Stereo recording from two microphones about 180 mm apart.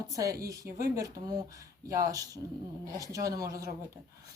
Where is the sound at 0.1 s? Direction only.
20° right (ahead or behind).